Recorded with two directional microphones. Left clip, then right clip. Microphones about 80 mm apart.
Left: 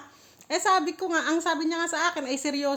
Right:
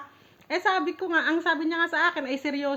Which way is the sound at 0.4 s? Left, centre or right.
Left.